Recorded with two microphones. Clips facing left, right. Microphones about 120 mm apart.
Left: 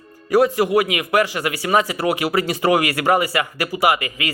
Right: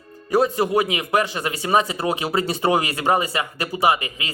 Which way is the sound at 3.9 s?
75° left (ahead or behind).